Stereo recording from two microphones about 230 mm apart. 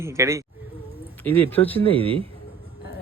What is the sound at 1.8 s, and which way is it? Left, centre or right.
Speech, right.